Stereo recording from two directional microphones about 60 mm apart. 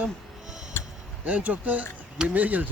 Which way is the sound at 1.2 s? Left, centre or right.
Right.